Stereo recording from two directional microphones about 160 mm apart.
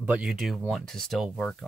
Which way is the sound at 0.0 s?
5° right (ahead or behind).